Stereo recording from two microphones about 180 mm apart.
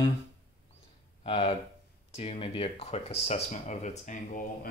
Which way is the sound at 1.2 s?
30° left (ahead or behind).